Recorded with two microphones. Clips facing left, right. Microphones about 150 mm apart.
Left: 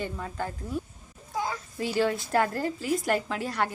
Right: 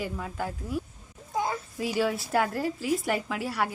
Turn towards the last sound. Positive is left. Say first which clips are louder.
# even
turn(degrees=-5)  # may be behind; listen again after turning